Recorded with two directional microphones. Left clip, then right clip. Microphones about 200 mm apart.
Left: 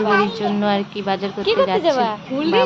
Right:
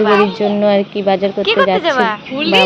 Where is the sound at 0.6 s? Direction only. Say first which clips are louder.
Right 7 dB; 15° right (ahead or behind).